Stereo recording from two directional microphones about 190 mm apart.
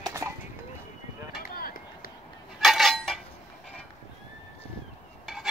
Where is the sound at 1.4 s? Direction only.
50° left (ahead or behind).